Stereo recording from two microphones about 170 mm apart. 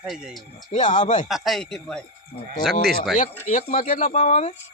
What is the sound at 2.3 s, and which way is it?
Speech, 45° left (ahead or behind).